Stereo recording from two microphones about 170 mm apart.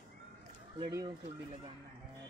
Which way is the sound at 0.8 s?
25° right (ahead or behind).